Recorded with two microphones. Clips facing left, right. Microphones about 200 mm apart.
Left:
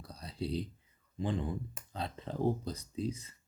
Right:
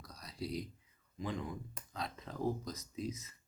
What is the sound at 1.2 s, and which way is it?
Speech, 30° left (ahead or behind).